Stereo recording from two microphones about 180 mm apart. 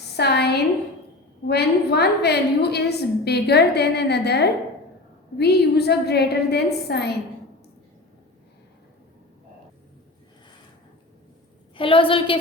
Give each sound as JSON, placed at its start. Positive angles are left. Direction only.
{"t": 0.2, "sound": "a sound", "side_deg": 65}
{"t": 1.5, "sound": "a woman's voice", "side_deg": 65}
{"t": 11.8, "sound": "a woman's voice", "side_deg": 30}